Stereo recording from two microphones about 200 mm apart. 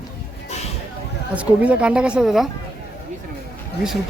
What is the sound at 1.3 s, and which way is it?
A woman's voice, 5° right (ahead or behind).